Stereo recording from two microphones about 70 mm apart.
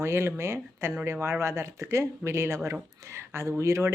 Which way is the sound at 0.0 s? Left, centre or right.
Right.